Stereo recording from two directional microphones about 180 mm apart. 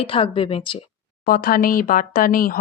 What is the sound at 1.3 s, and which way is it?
A woman's voice, 55° left (ahead or behind).